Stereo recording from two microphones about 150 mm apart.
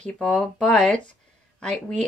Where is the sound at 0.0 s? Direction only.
5° left (ahead or behind).